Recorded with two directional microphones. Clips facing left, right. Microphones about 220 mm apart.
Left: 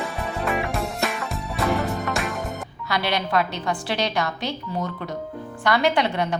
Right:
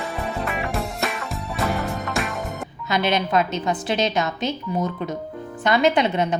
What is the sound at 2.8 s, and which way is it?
A woman's voice, 20° right (ahead or behind).